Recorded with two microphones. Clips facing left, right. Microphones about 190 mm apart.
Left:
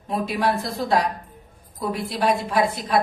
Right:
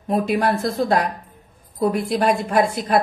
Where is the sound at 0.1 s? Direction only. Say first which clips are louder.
Right 4 dB; 45° right (ahead or behind).